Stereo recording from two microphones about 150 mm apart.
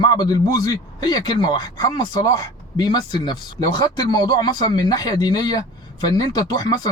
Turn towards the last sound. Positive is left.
turn(degrees=25)  # may be behind; listen again after turning